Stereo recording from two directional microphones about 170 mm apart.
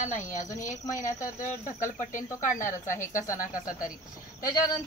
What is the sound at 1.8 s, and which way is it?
Speech, 50° left (ahead or behind).